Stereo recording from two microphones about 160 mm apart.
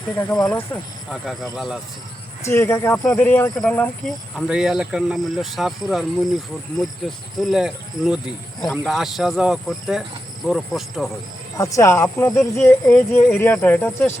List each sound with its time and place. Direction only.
0.3 s speech: 20° left (ahead or behind)
1.1 s speech: centre (ahead or behind)
2.4 s speech: 15° left (ahead or behind); by 11.1 s centre (ahead or behind)
11.5 s speech: 20° left (ahead or behind)